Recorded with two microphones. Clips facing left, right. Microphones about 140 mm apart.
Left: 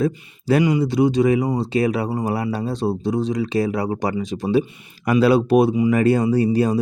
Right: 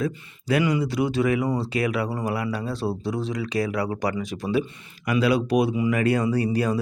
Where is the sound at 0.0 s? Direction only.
30° left (ahead or behind).